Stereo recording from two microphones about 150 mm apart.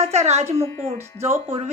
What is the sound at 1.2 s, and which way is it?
Speech, 15° right (ahead or behind).